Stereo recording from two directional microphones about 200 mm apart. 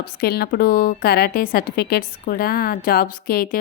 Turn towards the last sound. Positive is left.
turn(degrees=45)  # may be behind; listen again after turning